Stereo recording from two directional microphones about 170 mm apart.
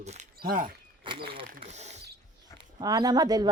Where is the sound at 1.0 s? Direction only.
30° right (ahead or behind).